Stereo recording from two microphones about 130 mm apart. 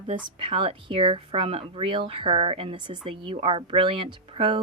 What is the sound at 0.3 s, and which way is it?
A woman's voice, 45° right (ahead or behind).